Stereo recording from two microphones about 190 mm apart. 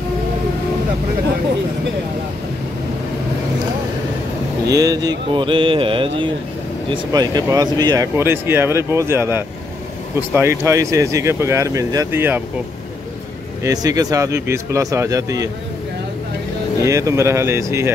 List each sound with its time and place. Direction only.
4.6 s a sound: 20° right (ahead or behind)
6.9 s speech: 20° right (ahead or behind)
13.6 s speech: 20° right (ahead or behind)
16.8 s speech: 15° right (ahead or behind)